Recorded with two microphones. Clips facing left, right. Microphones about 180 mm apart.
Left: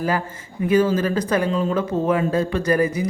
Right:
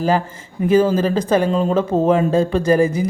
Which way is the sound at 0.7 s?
30° right (ahead or behind).